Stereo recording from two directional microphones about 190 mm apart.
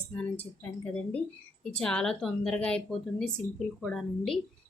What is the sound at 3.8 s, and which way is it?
Speech, centre (ahead or behind).